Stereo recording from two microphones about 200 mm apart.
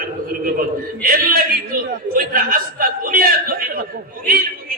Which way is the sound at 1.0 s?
45° right (ahead or behind).